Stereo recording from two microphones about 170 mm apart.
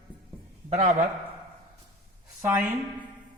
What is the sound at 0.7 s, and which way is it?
Speech, 45° right (ahead or behind).